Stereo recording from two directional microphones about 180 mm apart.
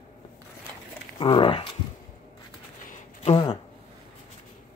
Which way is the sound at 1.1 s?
30° left (ahead or behind).